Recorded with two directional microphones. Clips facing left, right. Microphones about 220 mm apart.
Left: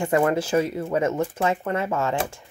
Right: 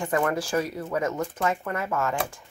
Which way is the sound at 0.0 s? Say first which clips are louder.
Left 5 dB; 25° left (ahead or behind).